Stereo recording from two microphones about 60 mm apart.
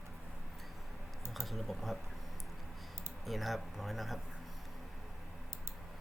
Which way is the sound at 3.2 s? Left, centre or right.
Centre.